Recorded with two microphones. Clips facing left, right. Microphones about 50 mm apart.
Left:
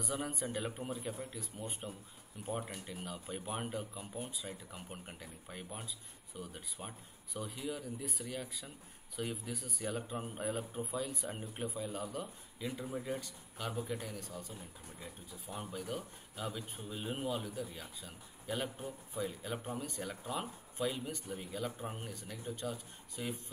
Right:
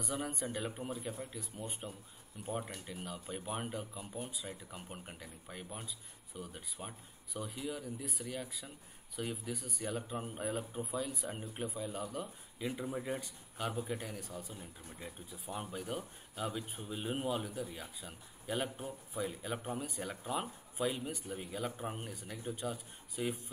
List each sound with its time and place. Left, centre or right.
0.0 s speech: centre
12.5 s speech: centre